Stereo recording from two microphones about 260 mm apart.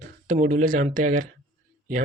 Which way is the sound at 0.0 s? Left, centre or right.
Right.